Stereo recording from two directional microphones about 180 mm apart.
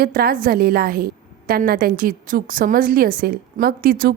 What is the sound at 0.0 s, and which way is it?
A woman's voice, 55° right (ahead or behind).